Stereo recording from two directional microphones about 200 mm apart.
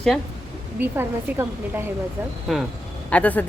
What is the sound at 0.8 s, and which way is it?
A woman's voice, 10° right (ahead or behind).